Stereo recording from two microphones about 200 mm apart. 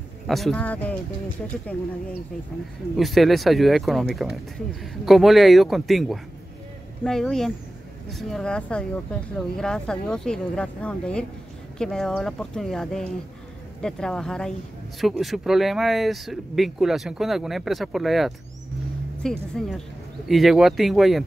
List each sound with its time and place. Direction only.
0.3 s speech: centre (ahead or behind)
3.0 s speech: centre (ahead or behind)